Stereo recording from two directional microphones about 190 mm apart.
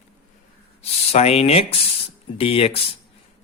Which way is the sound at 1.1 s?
35° left (ahead or behind).